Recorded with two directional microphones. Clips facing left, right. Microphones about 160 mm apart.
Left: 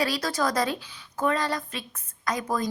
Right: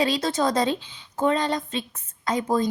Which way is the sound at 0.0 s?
25° right (ahead or behind).